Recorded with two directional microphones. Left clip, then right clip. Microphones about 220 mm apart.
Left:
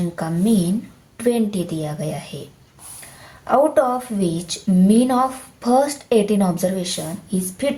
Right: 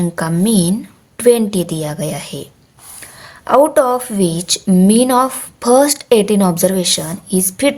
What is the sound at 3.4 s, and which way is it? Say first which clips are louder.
A woman's voice: right 5 dB; 45° right (ahead or behind).